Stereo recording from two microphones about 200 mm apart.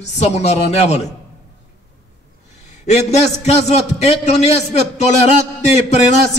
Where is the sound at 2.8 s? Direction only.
35° left (ahead or behind).